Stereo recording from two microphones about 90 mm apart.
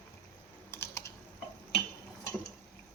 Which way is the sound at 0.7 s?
25° left (ahead or behind).